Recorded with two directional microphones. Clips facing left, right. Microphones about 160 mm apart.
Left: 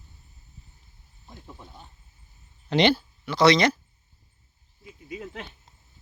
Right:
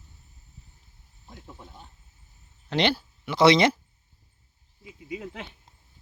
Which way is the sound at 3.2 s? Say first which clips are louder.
Right 1 dB; 25° right (ahead or behind).